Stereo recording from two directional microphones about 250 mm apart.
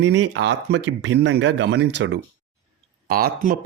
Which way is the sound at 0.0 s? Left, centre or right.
Right.